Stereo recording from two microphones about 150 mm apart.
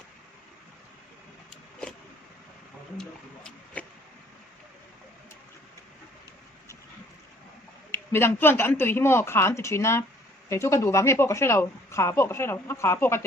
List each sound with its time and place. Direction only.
3.0 s speech: 5° left (ahead or behind)
7.9 s a woman's voice: 15° left (ahead or behind)